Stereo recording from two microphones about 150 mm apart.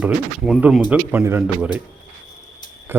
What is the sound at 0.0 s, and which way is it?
Speech, 5° right (ahead or behind).